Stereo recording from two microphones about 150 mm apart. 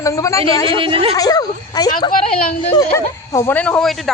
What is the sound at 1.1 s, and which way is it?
Speech, 25° left (ahead or behind).